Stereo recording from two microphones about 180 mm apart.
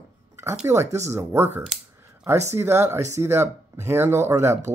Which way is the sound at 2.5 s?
15° right (ahead or behind).